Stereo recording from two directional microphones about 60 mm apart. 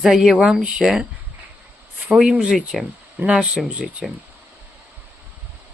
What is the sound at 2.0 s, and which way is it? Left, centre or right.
Speech, centre.